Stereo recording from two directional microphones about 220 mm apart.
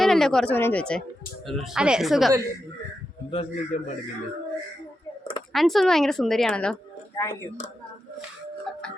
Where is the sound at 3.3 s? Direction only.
25° left (ahead or behind).